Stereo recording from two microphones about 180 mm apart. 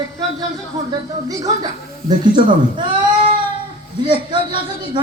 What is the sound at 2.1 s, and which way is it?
Speech, 25° right (ahead or behind).